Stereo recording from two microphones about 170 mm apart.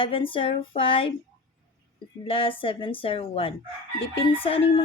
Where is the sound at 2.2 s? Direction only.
35° left (ahead or behind).